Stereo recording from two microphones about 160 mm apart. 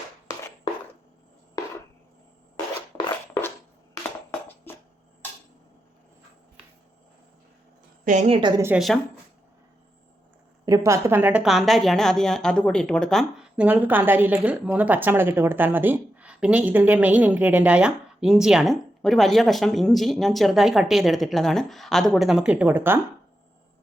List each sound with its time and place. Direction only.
2.9 s a sound: 20° left (ahead or behind)
4.7 s a sound: 15° left (ahead or behind)
8.0 s a woman's voice: 45° right (ahead or behind)
8.4 s a woman's voice: 30° right (ahead or behind)
10.7 s a woman's voice: 20° right (ahead or behind); by 13.7 s centre (ahead or behind)
13.7 s a woman's voice: 10° right (ahead or behind)